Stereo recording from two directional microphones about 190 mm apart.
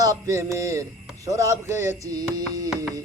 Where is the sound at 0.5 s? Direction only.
15° right (ahead or behind).